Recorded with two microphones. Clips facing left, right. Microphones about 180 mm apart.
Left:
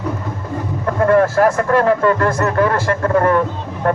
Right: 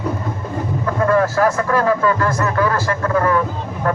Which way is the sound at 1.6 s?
30° left (ahead or behind).